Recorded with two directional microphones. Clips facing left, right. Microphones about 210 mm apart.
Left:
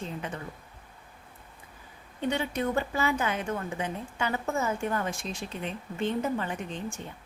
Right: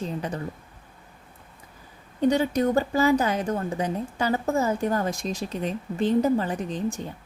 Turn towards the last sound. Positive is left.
turn(degrees=-35)  # may be behind; listen again after turning